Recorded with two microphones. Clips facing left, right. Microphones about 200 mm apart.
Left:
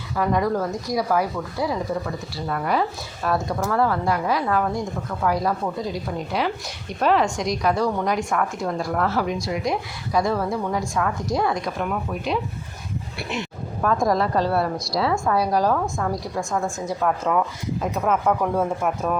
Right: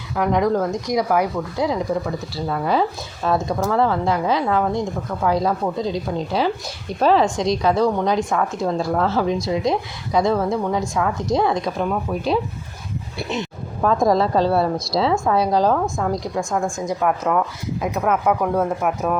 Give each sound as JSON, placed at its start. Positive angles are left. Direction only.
{"t": 0.2, "sound": "a woman's voice", "side_deg": -20}
{"t": 14.1, "sound": "a woman's voice", "side_deg": -25}
{"t": 16.3, "sound": "a woman's voice", "side_deg": 0}